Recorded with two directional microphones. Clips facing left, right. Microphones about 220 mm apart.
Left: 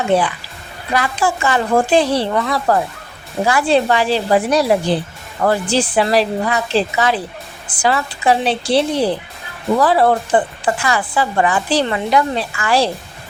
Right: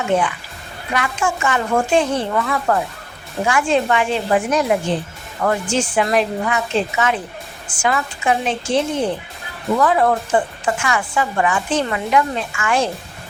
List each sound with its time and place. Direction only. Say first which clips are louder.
0.9 s speech: left 3 dB; 35° left (ahead or behind)